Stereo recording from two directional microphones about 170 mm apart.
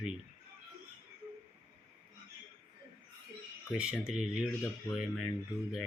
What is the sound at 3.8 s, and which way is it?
Speech, 5° right (ahead or behind).